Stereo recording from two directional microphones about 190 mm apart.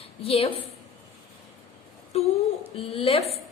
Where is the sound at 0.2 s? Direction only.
30° left (ahead or behind).